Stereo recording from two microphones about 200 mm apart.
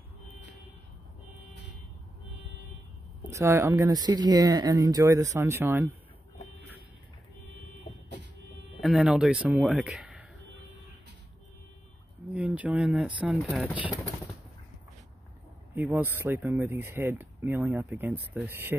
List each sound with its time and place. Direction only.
3.3 s speech: 15° right (ahead or behind)
8.8 s speech: centre (ahead or behind)
12.3 s speech: 5° right (ahead or behind)
15.7 s speech: 10° right (ahead or behind)